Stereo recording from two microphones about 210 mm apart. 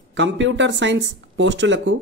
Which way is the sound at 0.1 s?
60° right (ahead or behind).